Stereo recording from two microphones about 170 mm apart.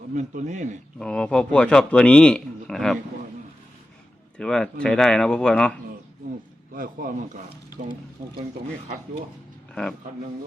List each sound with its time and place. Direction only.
0.1 s speech: 45° right (ahead or behind)
0.9 s a man's voice: 5° left (ahead or behind)
4.4 s a man's voice: 5° left (ahead or behind)
6.7 s speech: 55° right (ahead or behind)